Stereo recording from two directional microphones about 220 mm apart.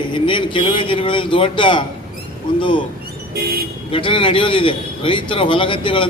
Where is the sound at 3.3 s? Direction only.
45° right (ahead or behind).